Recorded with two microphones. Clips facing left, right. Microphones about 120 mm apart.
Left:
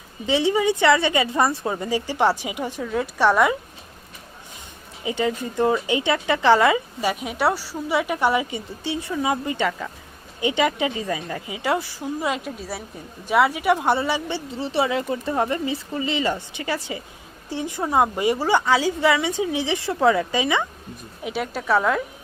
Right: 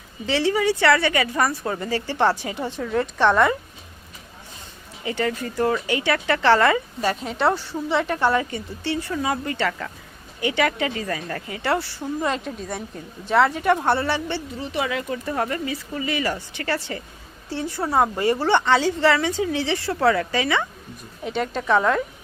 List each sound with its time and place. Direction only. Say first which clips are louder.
0.3 s speech: left 1 dB; 20° left (ahead or behind)
5.0 s speech: left 1 dB; 20° left (ahead or behind)
14.6 s speech: left 6 dB; 30° left (ahead or behind)
21.2 s a woman's voice: right 1 dB; 5° left (ahead or behind)